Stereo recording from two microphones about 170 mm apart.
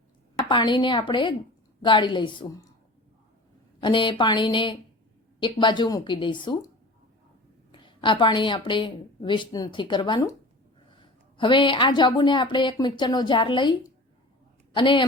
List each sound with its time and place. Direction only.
0.3 s a woman's voice: 25° left (ahead or behind)
3.8 s a woman's voice: 30° left (ahead or behind)
7.7 s a woman's voice: 30° left (ahead or behind)